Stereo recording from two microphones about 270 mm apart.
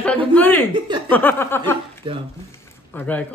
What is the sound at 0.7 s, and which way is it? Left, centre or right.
Speech, centre.